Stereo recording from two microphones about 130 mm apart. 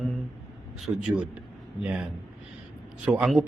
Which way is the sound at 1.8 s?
10° right (ahead or behind).